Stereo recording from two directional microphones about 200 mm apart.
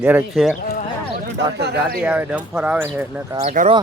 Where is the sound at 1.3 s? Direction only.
55° right (ahead or behind).